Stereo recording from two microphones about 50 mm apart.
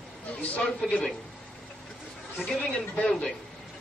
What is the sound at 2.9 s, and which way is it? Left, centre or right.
Speech, left.